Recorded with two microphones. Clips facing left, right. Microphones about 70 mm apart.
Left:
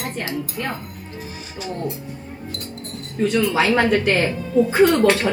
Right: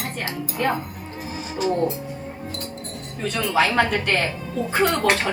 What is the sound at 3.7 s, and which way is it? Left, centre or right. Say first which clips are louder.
Speech: left 3 dB; centre.